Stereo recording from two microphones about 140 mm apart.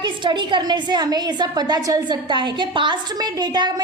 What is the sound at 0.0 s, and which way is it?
A woman's voice, 35° right (ahead or behind).